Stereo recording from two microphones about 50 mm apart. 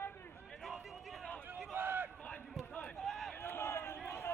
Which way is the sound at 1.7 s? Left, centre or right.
Right.